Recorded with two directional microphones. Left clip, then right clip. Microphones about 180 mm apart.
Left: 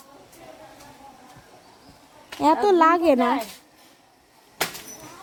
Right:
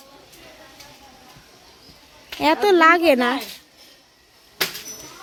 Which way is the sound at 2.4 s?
Centre (ahead or behind).